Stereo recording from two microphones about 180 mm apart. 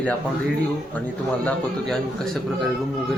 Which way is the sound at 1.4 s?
5° left (ahead or behind).